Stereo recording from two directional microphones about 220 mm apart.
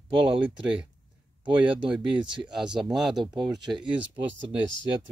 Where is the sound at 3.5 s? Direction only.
Centre (ahead or behind).